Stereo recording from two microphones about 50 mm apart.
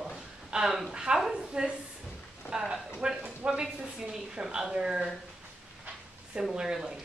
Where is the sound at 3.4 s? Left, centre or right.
Right.